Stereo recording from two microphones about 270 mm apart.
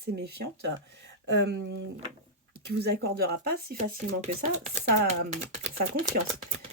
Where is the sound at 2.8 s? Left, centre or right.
Right.